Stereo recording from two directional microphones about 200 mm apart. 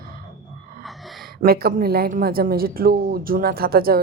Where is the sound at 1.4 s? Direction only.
50° right (ahead or behind).